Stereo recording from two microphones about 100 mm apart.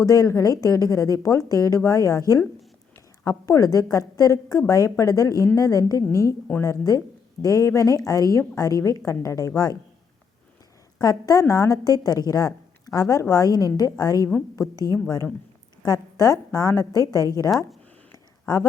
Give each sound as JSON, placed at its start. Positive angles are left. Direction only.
{"t": 0.0, "sound": "a woman's voice", "side_deg": 35}
{"t": 11.0, "sound": "a woman's voice", "side_deg": 40}
{"t": 15.8, "sound": "a woman's voice", "side_deg": 35}
{"t": 18.1, "sound": "a sound", "side_deg": 40}